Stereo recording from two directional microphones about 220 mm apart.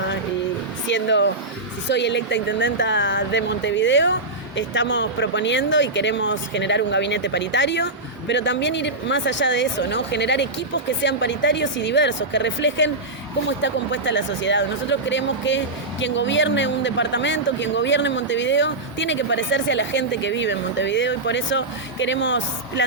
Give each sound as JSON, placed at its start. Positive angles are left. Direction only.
{"t": 0.9, "sound": "speech", "side_deg": 55}